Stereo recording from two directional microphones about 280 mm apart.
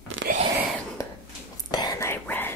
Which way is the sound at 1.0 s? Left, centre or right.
Centre.